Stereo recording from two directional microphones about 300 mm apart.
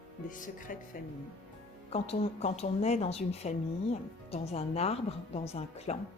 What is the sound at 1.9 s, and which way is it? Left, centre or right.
A woman's voice, left.